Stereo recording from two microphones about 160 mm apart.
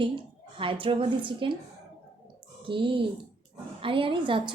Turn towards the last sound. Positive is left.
turn(degrees=-30)  # may be behind; listen again after turning